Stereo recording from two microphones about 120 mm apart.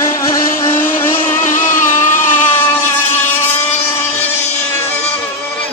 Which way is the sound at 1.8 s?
20° left (ahead or behind).